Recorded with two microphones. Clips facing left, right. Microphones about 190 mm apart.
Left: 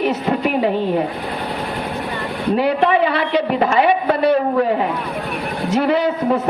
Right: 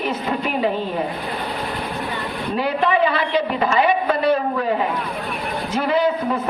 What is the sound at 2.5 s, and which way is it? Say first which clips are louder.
A man's voice: left 3 dB; 65° left (ahead or behind).